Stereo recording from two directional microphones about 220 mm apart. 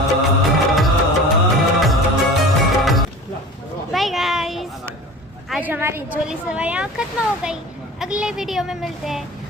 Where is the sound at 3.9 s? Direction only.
Centre (ahead or behind).